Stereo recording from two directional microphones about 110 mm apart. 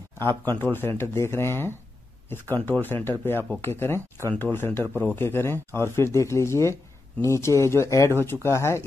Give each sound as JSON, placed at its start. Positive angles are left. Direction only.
{"t": 0.2, "sound": "speech", "side_deg": 20}